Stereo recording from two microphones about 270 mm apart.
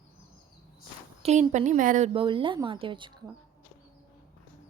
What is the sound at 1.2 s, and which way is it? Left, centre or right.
Speech, right.